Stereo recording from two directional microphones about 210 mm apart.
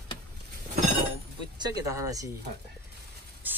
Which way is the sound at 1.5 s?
20° right (ahead or behind).